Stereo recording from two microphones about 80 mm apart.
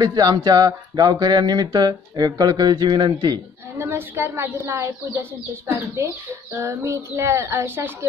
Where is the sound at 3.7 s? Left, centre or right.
Right.